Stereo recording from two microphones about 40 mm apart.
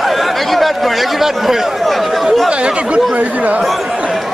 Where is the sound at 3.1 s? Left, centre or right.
Right.